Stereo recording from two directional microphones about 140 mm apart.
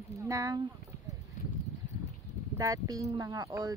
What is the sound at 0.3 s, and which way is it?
Speech, 25° right (ahead or behind).